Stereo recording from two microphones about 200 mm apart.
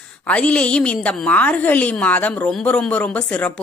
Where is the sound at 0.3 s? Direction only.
5° left (ahead or behind).